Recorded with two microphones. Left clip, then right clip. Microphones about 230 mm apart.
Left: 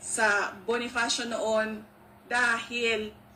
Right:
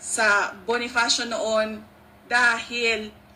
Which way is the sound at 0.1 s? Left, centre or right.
Right.